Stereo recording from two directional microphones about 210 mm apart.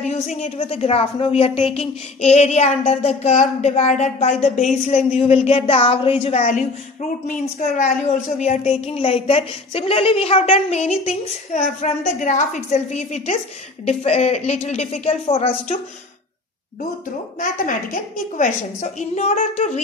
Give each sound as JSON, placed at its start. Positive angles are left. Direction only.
{"t": 0.0, "sound": "a woman's voice", "side_deg": 35}
{"t": 17.4, "sound": "a woman's voice", "side_deg": 40}